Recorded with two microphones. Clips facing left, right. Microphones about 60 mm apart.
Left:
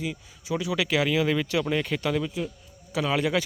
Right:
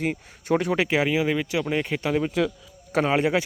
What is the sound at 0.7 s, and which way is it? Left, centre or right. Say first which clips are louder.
Speech: right 2 dB; right.